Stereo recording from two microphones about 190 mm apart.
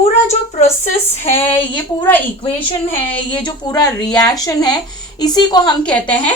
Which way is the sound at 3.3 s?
25° left (ahead or behind).